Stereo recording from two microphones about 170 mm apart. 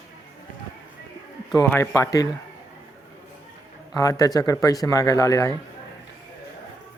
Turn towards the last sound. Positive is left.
turn(degrees=20)  # may be behind; listen again after turning